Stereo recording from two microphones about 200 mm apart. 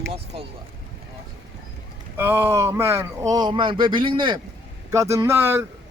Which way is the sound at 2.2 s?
10° right (ahead or behind).